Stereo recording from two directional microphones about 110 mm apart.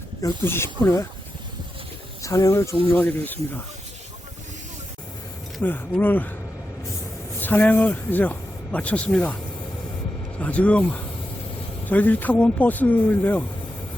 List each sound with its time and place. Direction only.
0.4 s speech: 20° left (ahead or behind)
2.2 s speech: 30° left (ahead or behind)
5.6 s speech: 15° left (ahead or behind)
7.3 s speech: 15° left (ahead or behind)
10.3 s speech: 10° left (ahead or behind)